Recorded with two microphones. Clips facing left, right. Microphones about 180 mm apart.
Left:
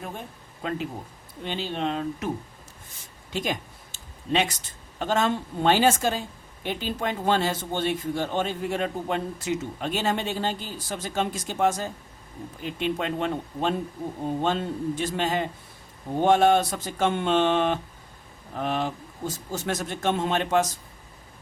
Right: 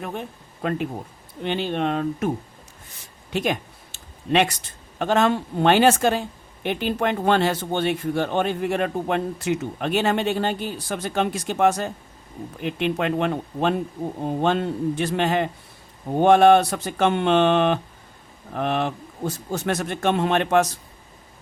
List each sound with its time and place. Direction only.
1.5 s speech: 60° right (ahead or behind)
3.3 s speech: 65° right (ahead or behind)